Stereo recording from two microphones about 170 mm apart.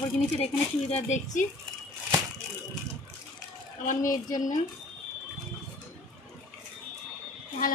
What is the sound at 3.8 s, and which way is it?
Speech, 50° left (ahead or behind).